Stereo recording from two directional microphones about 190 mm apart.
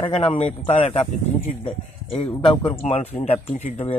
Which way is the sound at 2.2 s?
25° left (ahead or behind).